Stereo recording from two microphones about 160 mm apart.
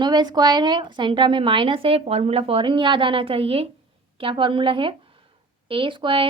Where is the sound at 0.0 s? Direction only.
25° right (ahead or behind).